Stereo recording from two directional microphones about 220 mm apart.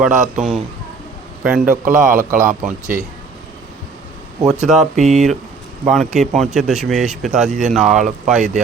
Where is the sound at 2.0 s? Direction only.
40° right (ahead or behind).